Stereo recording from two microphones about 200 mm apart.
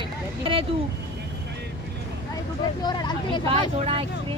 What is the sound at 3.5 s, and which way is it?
Vehicle, 30° right (ahead or behind).